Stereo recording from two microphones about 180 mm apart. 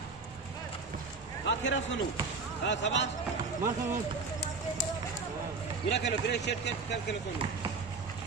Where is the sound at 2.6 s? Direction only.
90° left.